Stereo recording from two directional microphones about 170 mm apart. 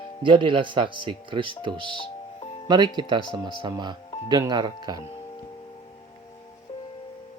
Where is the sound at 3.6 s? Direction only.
25° right (ahead or behind).